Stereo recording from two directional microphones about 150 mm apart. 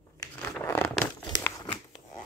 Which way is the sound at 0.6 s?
15° left (ahead or behind).